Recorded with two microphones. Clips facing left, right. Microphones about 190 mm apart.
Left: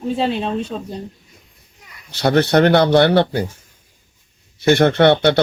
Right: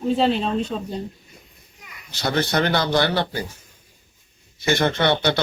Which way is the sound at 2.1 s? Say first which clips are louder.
Left 8 dB; 60° left (ahead or behind).